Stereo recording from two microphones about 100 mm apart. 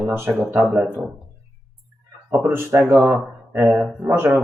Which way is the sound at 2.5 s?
20° right (ahead or behind).